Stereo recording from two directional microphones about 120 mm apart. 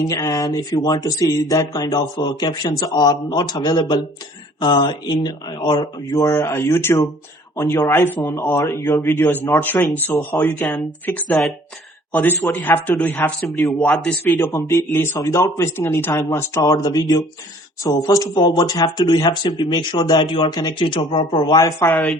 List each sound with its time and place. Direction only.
0.1 s speech: 30° left (ahead or behind)
6.2 s a man's voice: 20° left (ahead or behind)
11.3 s speech: centre (ahead or behind)
12.1 s a man's voice: 15° left (ahead or behind)
13.8 s a man's voice: 5° left (ahead or behind)
14.3 s speech: 25° left (ahead or behind)